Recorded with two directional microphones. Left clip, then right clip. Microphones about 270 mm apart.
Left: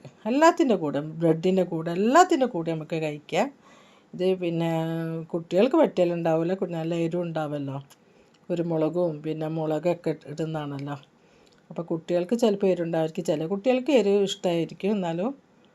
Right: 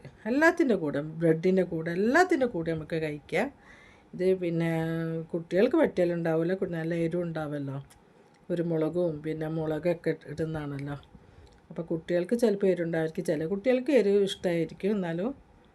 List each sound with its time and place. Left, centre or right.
0.0 s speech: centre